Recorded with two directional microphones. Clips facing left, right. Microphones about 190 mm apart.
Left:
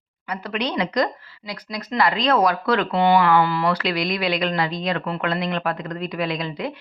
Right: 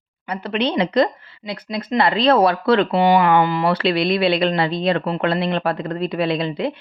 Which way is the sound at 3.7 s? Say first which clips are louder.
Right 5 dB; 30° right (ahead or behind).